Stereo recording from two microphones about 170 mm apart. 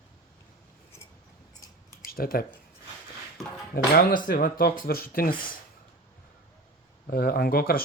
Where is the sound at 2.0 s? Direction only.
60° left (ahead or behind).